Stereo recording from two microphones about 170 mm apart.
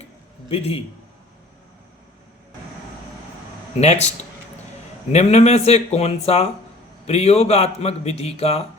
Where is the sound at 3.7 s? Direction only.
40° left (ahead or behind).